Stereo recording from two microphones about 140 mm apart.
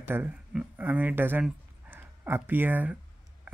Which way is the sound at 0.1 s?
15° right (ahead or behind).